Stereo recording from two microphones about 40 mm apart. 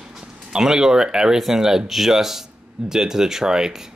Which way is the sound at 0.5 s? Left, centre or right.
Centre.